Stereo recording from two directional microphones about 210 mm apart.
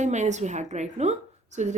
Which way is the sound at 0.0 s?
35° right (ahead or behind).